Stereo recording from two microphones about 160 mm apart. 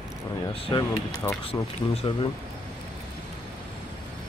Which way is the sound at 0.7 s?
30° left (ahead or behind).